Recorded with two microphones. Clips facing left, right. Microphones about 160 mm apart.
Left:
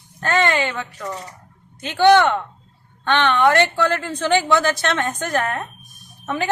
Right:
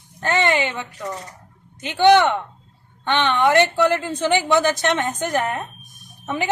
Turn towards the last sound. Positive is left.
turn(degrees=-15)  # may be behind; listen again after turning